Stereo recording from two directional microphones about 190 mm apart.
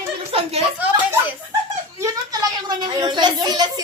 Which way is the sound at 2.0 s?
20° right (ahead or behind).